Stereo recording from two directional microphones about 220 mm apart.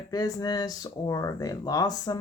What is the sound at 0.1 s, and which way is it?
Speech, 15° left (ahead or behind).